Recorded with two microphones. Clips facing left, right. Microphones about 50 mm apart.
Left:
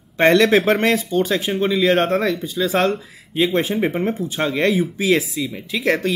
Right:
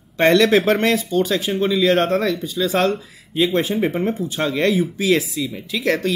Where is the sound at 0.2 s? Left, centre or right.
Centre.